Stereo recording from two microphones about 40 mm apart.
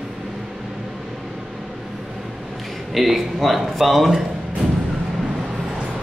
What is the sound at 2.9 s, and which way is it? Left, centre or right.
A man's voice, centre.